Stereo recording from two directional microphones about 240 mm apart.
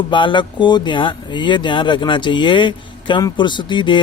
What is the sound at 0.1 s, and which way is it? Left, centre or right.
Speech, centre.